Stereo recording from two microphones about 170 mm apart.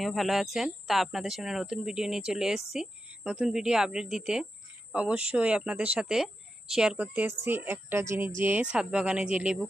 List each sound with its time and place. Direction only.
0.0 s speech: centre (ahead or behind)